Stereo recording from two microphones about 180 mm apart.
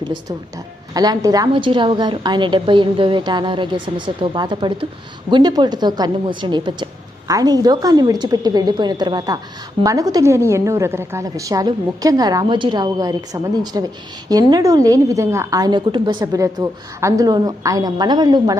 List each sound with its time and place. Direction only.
0.0 s a woman's voice: 25° right (ahead or behind)